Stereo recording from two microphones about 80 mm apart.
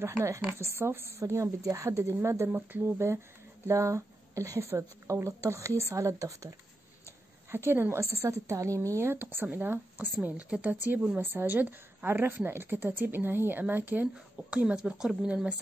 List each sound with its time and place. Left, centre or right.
0.0 s speech: right
7.5 s a woman's voice: right; by 15.5 s centre